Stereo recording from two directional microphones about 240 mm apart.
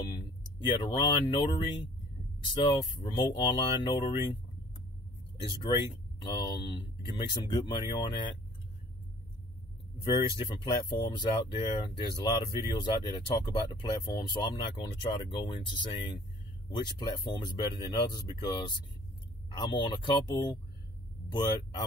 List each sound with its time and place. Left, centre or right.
0.0 s speech: centre
5.6 s speech: centre
10.0 s speech: centre